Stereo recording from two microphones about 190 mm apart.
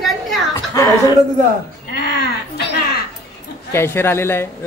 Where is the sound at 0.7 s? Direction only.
20° left (ahead or behind).